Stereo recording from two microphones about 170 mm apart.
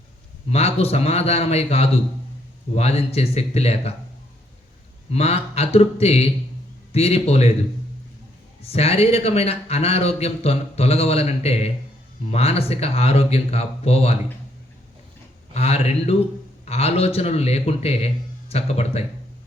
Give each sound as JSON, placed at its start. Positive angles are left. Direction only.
{"t": 0.5, "sound": "a man's voice", "side_deg": 35}
{"t": 5.1, "sound": "a man's voice", "side_deg": 35}
{"t": 8.6, "sound": "a man's voice", "side_deg": 35}
{"t": 15.5, "sound": "a man's voice", "side_deg": 40}